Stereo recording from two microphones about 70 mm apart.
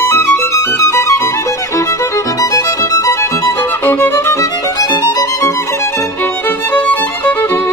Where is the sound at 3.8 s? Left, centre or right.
Left.